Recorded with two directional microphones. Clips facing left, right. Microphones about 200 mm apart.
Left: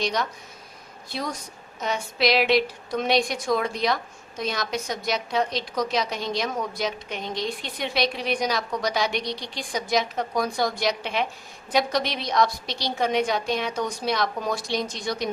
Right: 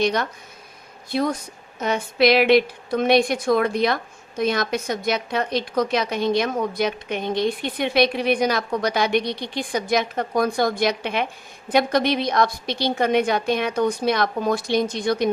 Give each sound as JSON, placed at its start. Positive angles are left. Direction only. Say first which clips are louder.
{"t": 0.0, "sound": "a woman's voice", "louder": "right 5 dB", "side_deg": -55}